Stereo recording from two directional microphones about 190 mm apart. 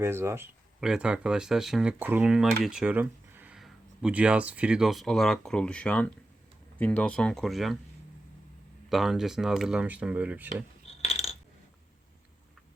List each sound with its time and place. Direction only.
0.0 s speech: 15° right (ahead or behind)
8.9 s speech: centre (ahead or behind)
10.8 s a sound: 35° left (ahead or behind)